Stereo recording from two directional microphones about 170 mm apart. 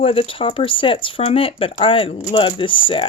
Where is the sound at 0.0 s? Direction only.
35° left (ahead or behind).